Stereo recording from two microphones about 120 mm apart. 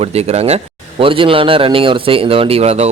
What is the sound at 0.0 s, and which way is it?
Speech, 60° right (ahead or behind).